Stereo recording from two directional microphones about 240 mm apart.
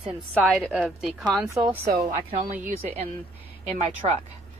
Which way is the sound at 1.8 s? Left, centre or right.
Right.